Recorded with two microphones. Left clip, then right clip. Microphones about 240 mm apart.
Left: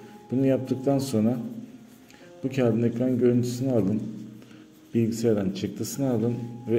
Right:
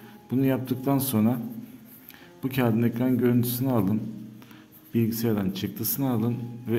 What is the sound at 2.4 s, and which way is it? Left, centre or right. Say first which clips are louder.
Speech: left 1 dB; right.